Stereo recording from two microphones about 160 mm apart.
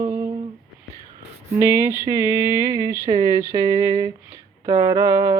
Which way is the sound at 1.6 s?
15° right (ahead or behind).